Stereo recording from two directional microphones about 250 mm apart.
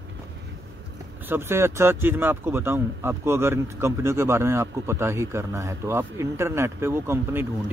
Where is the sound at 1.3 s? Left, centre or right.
Centre.